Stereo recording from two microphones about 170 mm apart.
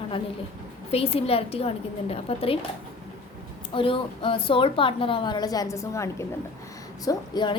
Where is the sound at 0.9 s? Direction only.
35° left (ahead or behind).